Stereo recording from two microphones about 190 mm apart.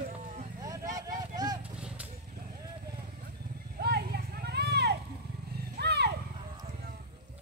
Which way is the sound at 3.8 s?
55° right (ahead or behind).